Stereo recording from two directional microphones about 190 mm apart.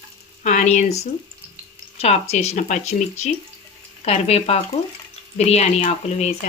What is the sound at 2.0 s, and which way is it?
A woman's voice, 35° left (ahead or behind).